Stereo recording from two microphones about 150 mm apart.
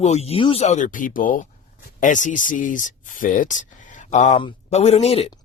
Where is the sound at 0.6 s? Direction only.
55° left (ahead or behind).